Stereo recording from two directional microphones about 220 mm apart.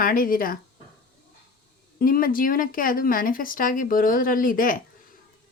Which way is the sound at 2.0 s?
40° left (ahead or behind).